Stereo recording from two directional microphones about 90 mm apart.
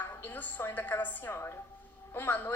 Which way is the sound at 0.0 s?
25° left (ahead or behind).